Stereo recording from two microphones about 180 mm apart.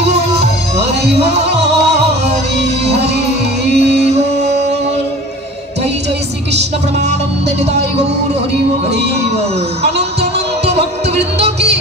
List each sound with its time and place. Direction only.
0.0 s music: 35° right (ahead or behind)
3.6 s music: 40° right (ahead or behind)